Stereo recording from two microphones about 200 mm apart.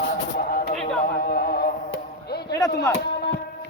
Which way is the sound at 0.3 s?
45° left (ahead or behind).